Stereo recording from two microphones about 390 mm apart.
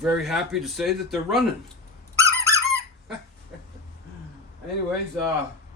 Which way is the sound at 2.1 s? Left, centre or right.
Centre.